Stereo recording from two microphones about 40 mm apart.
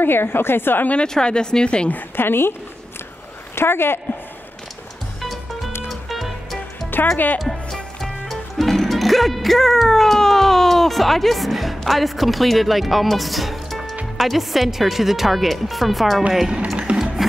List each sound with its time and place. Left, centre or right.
0.0 s a woman's voice: left
1.0 s speech: centre
2.1 s a woman's voice: left
3.5 s a woman's voice: left
5.2 s music: centre
7.3 s speech: centre
16.7 s music: right